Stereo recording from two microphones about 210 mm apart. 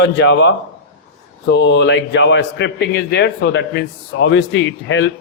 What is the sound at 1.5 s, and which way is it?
A man's voice, 60° left (ahead or behind).